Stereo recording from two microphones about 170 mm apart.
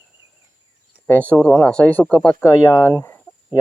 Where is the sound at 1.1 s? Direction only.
10° left (ahead or behind).